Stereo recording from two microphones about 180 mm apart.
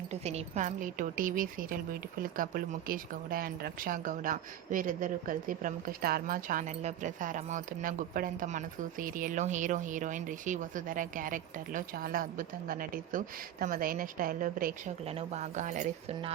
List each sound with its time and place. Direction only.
0.1 s a woman's voice: 35° right (ahead or behind)
15.0 s speech: 35° right (ahead or behind)